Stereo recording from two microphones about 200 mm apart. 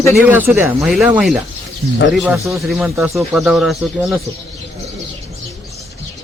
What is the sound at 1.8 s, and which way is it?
Speech, 50° right (ahead or behind).